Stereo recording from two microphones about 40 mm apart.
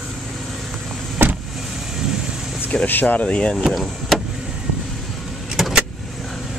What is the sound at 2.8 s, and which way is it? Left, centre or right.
Speech, left.